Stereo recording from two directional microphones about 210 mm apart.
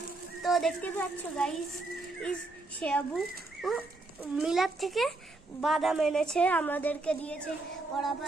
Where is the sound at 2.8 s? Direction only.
5° left (ahead or behind).